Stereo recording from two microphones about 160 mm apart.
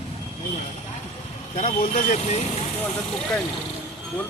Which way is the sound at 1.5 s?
50° left (ahead or behind).